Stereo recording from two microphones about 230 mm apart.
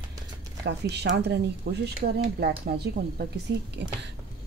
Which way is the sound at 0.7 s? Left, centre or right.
Right.